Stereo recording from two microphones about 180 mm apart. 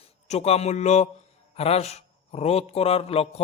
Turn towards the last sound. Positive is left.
turn(degrees=35)  # may be behind; listen again after turning